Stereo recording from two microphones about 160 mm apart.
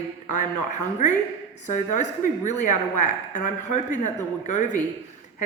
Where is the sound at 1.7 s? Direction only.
50° left (ahead or behind).